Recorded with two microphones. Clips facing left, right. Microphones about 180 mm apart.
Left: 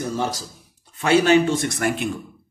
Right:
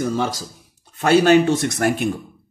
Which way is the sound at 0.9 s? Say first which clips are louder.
Right 3 dB; 50° right (ahead or behind).